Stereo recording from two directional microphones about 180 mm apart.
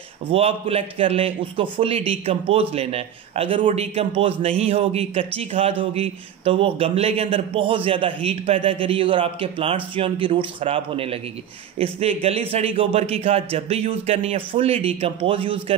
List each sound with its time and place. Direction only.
0.3 s a man's voice: 35° right (ahead or behind)